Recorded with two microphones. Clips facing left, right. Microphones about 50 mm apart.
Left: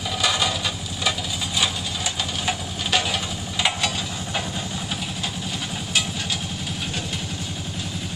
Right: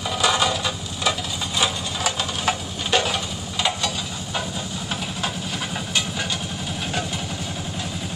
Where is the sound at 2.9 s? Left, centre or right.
Centre.